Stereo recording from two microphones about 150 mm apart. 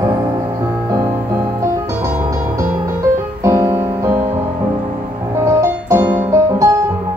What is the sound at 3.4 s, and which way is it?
Music, 20° right (ahead or behind).